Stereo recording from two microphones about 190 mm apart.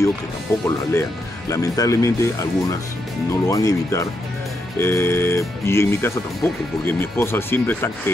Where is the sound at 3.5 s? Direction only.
15° left (ahead or behind).